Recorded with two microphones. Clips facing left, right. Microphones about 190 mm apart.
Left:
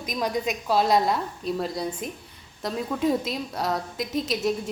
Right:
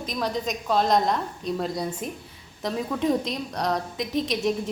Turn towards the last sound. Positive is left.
turn(degrees=0)  # may be behind; listen again after turning